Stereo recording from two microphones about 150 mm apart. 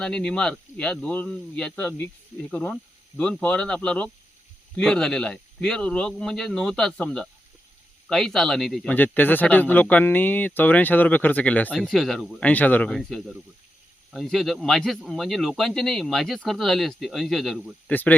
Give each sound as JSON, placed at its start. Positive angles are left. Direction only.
{"t": 0.0, "sound": "speech", "side_deg": 5}
{"t": 17.9, "sound": "speech", "side_deg": 10}